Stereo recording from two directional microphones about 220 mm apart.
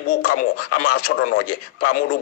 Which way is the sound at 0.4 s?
40° left (ahead or behind).